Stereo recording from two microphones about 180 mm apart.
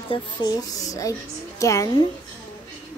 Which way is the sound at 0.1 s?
20° left (ahead or behind).